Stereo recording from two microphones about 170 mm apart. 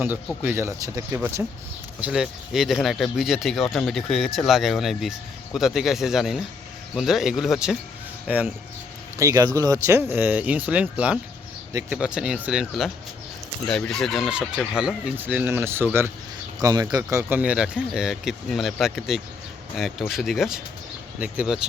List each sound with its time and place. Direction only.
0.4 s speech: 15° right (ahead or behind)
9.1 s a man's voice: 20° right (ahead or behind); by 21.7 s 5° right (ahead or behind)